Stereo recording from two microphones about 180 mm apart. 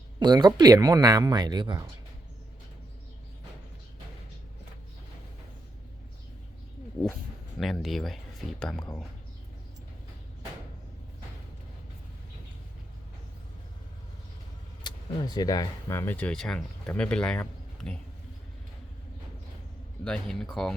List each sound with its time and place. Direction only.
0.2 s speech: 25° right (ahead or behind)
7.6 s speech: centre (ahead or behind)
14.8 s speech: 20° left (ahead or behind); by 18.0 s 5° left (ahead or behind)
20.1 s speech: 5° left (ahead or behind)